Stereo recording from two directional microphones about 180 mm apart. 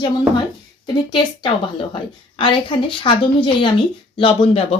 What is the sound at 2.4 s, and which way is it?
Speech, 30° left (ahead or behind).